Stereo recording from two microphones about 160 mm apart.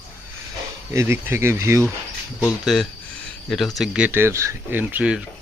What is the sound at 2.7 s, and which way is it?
Speech, centre (ahead or behind).